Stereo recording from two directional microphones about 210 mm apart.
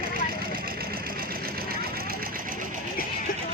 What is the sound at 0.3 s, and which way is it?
Vehicle, 45° right (ahead or behind).